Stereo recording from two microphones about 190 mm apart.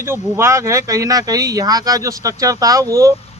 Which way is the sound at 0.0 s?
15° right (ahead or behind).